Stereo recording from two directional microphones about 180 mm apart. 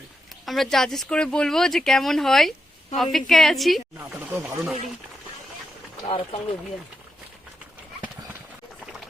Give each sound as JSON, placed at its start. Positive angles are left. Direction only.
{"t": 0.4, "sound": "speech", "side_deg": 0}
{"t": 4.1, "sound": "speech", "side_deg": -10}
{"t": 6.1, "sound": "speech", "side_deg": 25}